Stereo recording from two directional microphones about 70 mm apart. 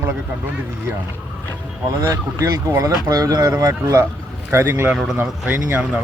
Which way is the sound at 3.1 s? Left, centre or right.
Right.